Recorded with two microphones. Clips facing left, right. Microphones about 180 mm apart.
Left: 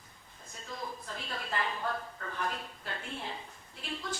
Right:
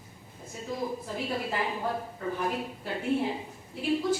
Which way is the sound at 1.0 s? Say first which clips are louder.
Right 9 dB; 10° right (ahead or behind).